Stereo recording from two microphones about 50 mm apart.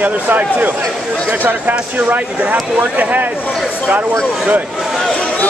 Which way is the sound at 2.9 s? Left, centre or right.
Right.